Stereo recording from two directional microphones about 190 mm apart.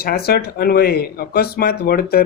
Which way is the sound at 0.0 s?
55° left (ahead or behind).